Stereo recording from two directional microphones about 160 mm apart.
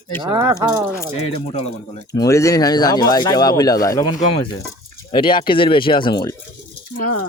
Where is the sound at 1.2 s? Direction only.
35° left (ahead or behind).